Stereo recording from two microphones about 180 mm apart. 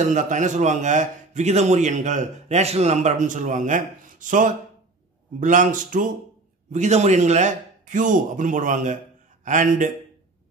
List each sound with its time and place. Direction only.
0.0 s a man's voice: 45° right (ahead or behind)